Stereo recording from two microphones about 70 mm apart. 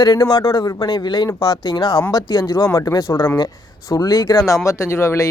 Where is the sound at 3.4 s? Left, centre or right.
Left.